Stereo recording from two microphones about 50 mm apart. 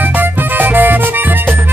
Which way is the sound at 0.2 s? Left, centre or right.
Right.